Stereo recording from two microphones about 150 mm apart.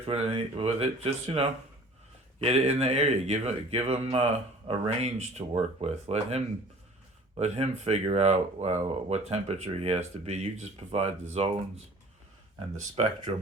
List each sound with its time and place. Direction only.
0.0 s speech: 40° right (ahead or behind)
13.0 s speech: 40° right (ahead or behind)